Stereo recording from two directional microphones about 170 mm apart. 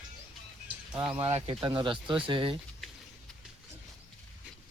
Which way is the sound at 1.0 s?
35° right (ahead or behind).